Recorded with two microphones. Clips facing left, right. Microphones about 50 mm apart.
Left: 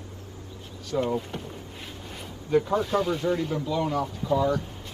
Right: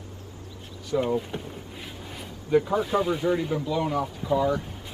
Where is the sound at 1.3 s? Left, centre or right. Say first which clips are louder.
Right 1 dB; right.